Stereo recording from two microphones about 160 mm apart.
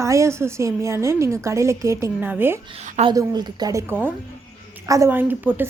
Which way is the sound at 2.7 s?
45° right (ahead or behind).